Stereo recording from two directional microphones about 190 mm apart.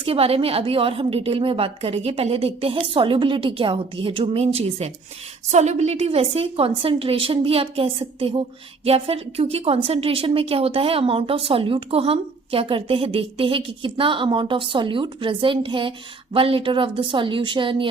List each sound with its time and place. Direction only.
0.0 s a woman's voice: 30° right (ahead or behind)